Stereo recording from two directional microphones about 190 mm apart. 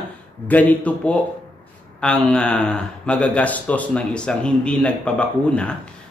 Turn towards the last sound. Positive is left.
turn(degrees=5)  # may be behind; listen again after turning